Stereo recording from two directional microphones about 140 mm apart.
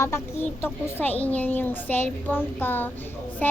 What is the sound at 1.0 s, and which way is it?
Child singing, 10° left (ahead or behind).